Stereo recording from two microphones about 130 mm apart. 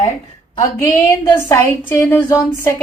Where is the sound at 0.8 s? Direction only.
20° left (ahead or behind).